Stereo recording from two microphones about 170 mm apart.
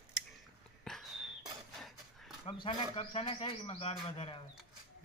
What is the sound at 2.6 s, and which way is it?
A man's voice, 35° left (ahead or behind).